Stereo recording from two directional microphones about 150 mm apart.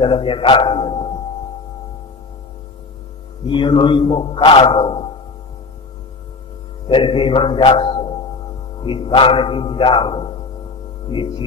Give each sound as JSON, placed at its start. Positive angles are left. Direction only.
{"t": 0.0, "sound": "a man's voice", "side_deg": 35}
{"t": 3.4, "sound": "a man's voice", "side_deg": 35}
{"t": 6.9, "sound": "a man's voice", "side_deg": 35}